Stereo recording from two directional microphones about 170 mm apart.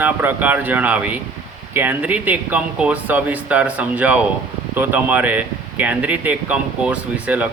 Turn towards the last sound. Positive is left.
turn(degrees=-10)  # may be behind; listen again after turning